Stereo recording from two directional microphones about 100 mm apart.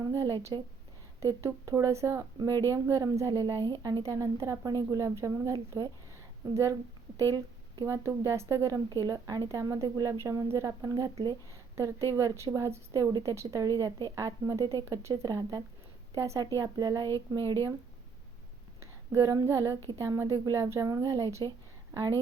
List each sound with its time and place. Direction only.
0.0 s speech: 35° right (ahead or behind)
0.5 s speech: 45° right (ahead or behind)
4.0 s speech: 30° right (ahead or behind)
7.9 s speech: 30° right (ahead or behind); by 17.7 s 45° right (ahead or behind)
18.8 s speech: 30° right (ahead or behind)